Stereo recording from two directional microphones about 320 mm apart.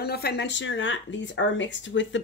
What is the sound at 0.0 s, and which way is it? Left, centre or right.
Speech, left.